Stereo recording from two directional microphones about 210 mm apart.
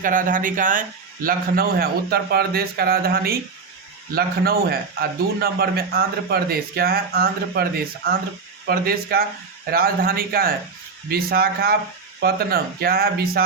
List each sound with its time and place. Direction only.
0.0 s a man's voice: 40° right (ahead or behind)